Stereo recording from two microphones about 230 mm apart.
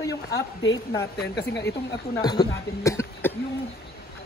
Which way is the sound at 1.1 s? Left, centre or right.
Left.